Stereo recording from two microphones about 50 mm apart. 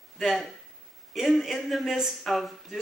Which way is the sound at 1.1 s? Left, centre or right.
Centre.